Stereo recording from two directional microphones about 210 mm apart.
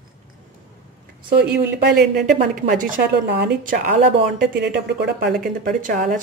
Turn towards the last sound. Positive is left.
turn(degrees=-40)  # may be behind; listen again after turning